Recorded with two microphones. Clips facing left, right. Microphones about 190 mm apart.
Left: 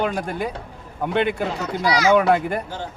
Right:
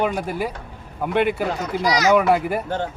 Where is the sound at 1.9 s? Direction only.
40° right (ahead or behind).